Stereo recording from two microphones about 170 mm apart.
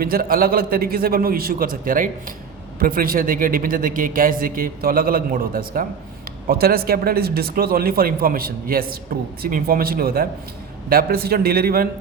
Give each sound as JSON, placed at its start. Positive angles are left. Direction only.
{"t": 0.0, "sound": "a man's voice", "side_deg": -60}